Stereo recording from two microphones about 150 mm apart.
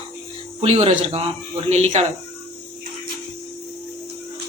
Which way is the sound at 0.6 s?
45° right (ahead or behind).